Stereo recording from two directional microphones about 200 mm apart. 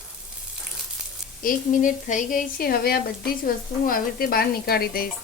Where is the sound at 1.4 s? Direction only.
40° left (ahead or behind).